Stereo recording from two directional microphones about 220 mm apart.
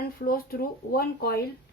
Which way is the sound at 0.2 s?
40° left (ahead or behind).